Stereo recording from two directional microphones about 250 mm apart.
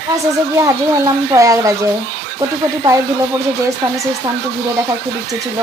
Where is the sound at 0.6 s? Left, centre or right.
Centre.